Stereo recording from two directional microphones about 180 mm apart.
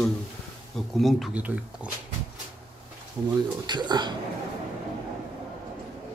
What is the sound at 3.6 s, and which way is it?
Speech, 25° right (ahead or behind).